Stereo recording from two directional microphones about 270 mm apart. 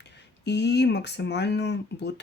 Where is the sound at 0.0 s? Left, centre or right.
Left.